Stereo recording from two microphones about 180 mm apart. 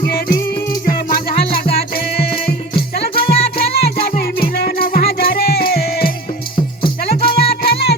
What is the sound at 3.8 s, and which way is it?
Music, 60° left (ahead or behind).